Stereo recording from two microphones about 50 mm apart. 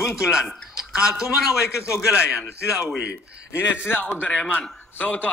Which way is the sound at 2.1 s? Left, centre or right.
Centre.